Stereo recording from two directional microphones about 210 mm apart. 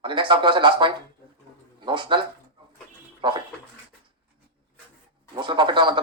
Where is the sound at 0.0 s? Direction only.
25° right (ahead or behind).